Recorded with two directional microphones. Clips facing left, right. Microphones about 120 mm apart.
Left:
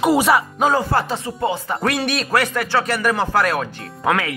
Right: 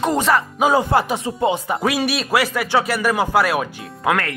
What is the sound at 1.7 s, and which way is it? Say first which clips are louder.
Speech: right 1 dB; 5° right (ahead or behind).